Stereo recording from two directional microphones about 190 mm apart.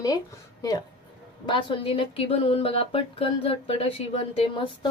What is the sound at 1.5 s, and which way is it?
A woman's voice, 25° left (ahead or behind).